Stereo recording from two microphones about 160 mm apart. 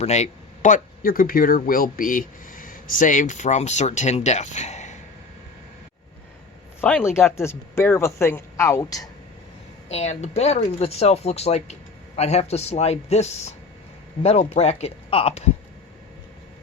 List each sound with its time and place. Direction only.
0.0 s speech: 45° left (ahead or behind)
6.8 s speech: 10° left (ahead or behind)
9.9 s speech: 45° left (ahead or behind)